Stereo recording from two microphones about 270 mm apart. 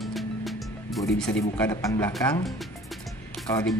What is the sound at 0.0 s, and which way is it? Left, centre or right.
Music, centre.